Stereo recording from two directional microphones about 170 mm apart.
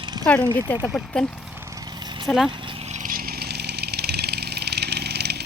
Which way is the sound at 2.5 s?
45° right (ahead or behind).